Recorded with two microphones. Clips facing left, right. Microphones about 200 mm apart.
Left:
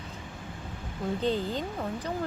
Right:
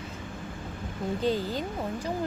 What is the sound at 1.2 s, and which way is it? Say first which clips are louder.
Speech: right 1 dB; 10° right (ahead or behind).